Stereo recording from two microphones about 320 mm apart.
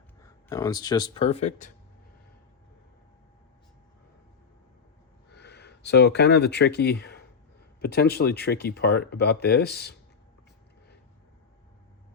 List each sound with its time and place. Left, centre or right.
0.2 s speech: centre
5.3 s speech: left